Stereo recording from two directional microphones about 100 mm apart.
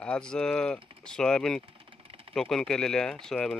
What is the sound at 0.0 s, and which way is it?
Speech, 10° left (ahead or behind).